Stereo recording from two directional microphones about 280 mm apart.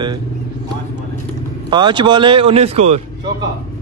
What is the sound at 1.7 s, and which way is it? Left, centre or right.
Speech, centre.